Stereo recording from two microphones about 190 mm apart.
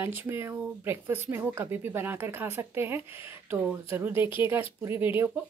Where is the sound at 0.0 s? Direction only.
10° right (ahead or behind).